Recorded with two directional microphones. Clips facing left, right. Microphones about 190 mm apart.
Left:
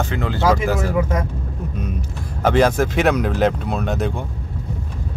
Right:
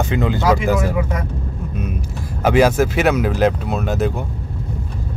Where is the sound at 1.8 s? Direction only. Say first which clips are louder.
Right 3 dB; 10° right (ahead or behind).